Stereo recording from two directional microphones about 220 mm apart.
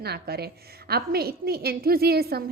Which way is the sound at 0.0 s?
45° right (ahead or behind).